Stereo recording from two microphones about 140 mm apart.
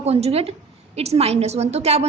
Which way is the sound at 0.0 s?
50° right (ahead or behind).